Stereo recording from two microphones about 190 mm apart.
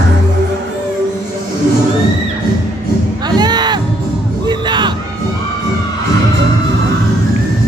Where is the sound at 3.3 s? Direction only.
20° right (ahead or behind).